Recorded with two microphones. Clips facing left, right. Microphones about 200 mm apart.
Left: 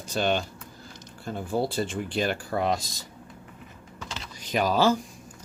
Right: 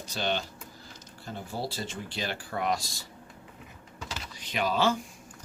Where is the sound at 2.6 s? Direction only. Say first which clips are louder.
Left 1 dB; 25° left (ahead or behind).